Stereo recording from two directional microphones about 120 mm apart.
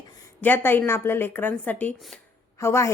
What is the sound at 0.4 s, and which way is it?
A woman's voice, 15° left (ahead or behind).